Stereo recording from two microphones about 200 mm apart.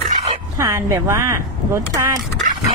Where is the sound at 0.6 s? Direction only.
15° right (ahead or behind).